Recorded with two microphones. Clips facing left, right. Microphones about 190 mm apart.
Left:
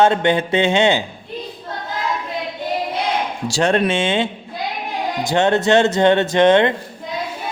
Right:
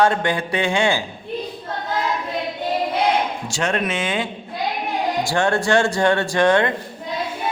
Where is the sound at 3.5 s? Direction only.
35° left (ahead or behind).